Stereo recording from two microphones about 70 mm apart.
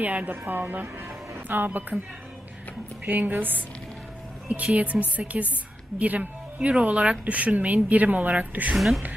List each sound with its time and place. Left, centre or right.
0.0 s speech: right
3.1 s speech: right
8.7 s speech: centre